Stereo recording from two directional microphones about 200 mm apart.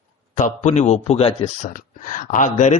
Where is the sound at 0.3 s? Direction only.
35° left (ahead or behind).